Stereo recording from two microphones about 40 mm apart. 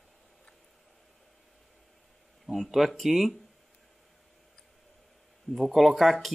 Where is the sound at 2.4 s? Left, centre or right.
Centre.